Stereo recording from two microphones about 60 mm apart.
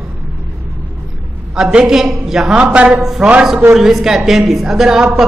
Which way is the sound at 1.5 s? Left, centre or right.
Centre.